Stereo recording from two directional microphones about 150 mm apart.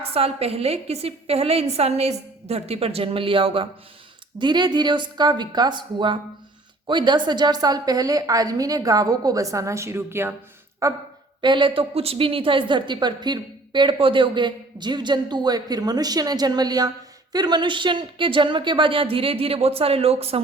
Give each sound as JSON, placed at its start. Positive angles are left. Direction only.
{"t": 0.0, "sound": "a woman's voice", "side_deg": -40}
{"t": 11.3, "sound": "a woman's voice", "side_deg": -30}